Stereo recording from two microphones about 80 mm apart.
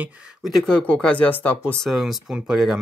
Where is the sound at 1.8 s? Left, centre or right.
Centre.